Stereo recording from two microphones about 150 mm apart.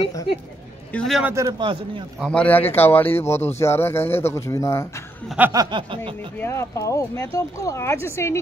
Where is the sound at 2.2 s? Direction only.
10° left (ahead or behind).